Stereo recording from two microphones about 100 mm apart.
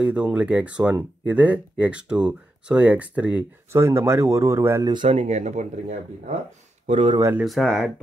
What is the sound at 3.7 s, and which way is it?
Speech, 25° right (ahead or behind).